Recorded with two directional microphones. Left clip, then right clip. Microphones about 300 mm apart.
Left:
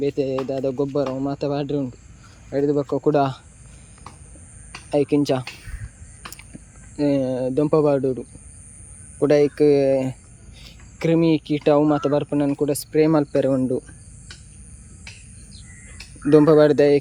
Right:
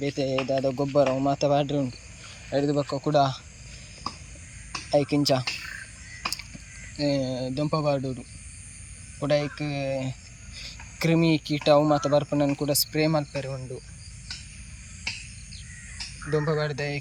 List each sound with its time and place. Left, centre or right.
0.0 s speech: centre
4.9 s speech: centre
6.9 s speech: centre
9.2 s speech: centre
16.6 s speech: left